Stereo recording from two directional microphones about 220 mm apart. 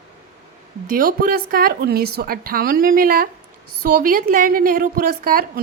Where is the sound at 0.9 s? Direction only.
40° right (ahead or behind).